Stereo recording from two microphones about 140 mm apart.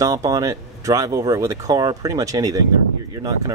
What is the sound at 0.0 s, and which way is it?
Speech, 25° right (ahead or behind).